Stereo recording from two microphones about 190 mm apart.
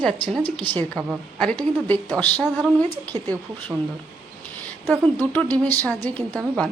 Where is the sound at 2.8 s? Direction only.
10° left (ahead or behind).